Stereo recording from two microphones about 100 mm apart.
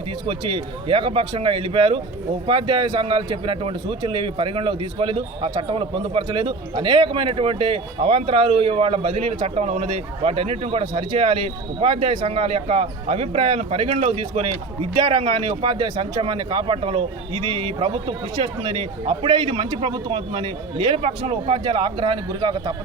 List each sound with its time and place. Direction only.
0.3 s a man's voice: 60° right (ahead or behind); by 10.8 s 90° right
10.9 s speech: 55° right (ahead or behind)
14.9 s a man's voice: 45° right (ahead or behind)